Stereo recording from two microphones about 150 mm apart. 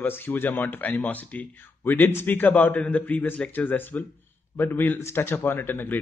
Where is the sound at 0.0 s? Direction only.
15° left (ahead or behind).